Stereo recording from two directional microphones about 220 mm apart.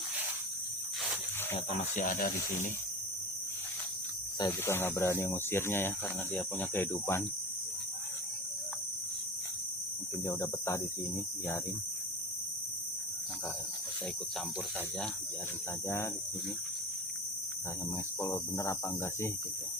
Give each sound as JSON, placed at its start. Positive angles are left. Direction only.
{"t": 1.5, "sound": "speech", "side_deg": 30}
{"t": 4.4, "sound": "speech", "side_deg": 10}
{"t": 10.2, "sound": "speech", "side_deg": 15}
{"t": 18.2, "sound": "speech", "side_deg": 15}